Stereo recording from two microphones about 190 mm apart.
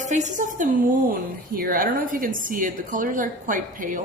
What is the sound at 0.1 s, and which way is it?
A woman's voice, 40° right (ahead or behind).